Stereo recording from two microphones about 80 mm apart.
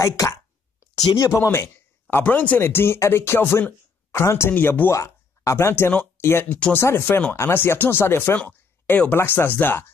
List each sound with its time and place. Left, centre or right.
0.9 s speech: left
2.2 s speech: centre
2.6 s speech: left
4.9 s speech: left